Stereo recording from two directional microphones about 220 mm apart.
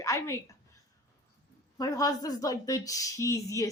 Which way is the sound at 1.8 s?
15° left (ahead or behind).